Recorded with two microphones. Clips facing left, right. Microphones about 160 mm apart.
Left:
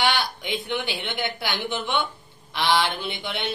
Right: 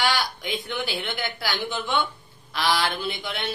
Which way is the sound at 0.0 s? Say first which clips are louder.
Left 1 dB; 20° left (ahead or behind).